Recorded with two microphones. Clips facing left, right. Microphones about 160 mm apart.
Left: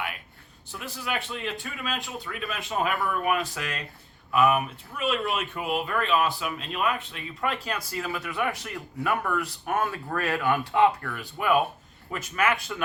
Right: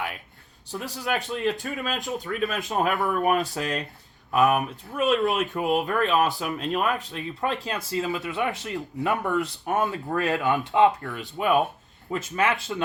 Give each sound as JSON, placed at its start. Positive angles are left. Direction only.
{"t": 0.7, "sound": "speech", "side_deg": -35}
{"t": 7.5, "sound": "speech", "side_deg": -25}